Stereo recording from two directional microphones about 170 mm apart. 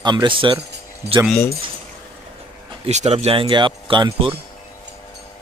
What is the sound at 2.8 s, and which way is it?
Speech, 40° right (ahead or behind).